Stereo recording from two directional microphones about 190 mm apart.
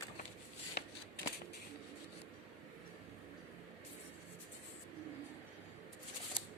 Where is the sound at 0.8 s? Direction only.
60° left (ahead or behind).